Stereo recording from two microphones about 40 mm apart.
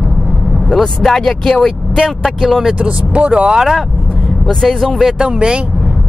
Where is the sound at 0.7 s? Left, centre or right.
Centre.